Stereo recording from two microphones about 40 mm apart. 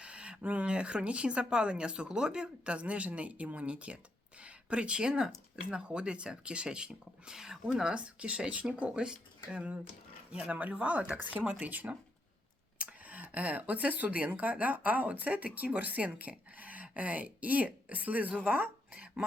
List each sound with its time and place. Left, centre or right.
0.0 s speech: right
11.1 s speech: right
12.8 s a sound: right
13.3 s speech: right
18.9 s cough: right